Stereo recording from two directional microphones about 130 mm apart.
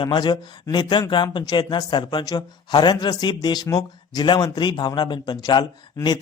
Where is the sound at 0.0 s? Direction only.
35° left (ahead or behind).